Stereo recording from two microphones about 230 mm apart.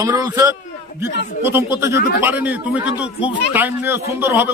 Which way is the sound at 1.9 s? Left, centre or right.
Left.